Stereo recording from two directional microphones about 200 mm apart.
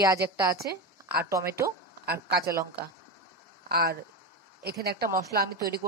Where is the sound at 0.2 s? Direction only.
15° right (ahead or behind).